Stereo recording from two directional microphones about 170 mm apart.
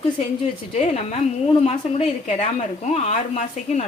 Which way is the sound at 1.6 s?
40° left (ahead or behind).